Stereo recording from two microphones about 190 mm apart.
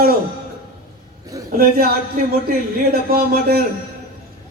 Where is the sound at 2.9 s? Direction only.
50° right (ahead or behind).